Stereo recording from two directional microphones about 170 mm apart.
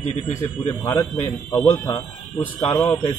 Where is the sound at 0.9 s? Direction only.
25° left (ahead or behind).